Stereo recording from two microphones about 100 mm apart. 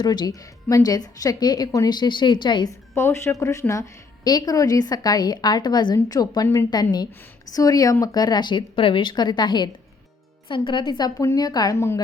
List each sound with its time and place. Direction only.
0.0 s a woman's voice: 45° left (ahead or behind)
2.6 s a woman's voice: 25° left (ahead or behind)